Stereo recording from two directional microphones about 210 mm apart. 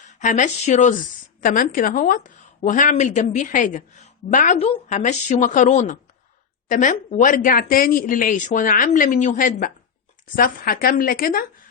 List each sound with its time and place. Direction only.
0.2 s a woman's voice: 35° left (ahead or behind)